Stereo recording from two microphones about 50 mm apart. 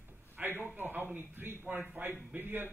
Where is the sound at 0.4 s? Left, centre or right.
Right.